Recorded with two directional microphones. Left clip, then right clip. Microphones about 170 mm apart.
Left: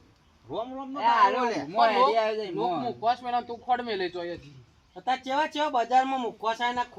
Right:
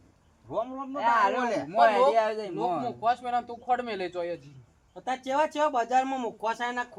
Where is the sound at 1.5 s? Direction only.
25° right (ahead or behind).